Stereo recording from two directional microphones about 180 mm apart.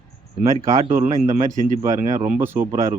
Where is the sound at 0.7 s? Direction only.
20° right (ahead or behind).